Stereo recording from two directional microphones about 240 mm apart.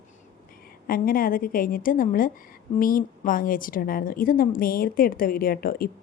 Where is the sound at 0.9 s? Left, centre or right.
Left.